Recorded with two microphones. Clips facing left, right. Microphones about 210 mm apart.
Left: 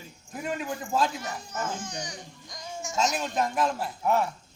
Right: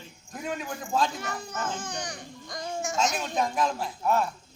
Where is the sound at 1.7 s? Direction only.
55° right (ahead or behind).